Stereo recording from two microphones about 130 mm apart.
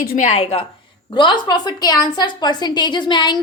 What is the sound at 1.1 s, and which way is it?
A woman's voice, 40° left (ahead or behind).